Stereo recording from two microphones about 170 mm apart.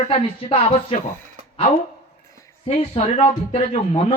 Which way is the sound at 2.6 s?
35° left (ahead or behind).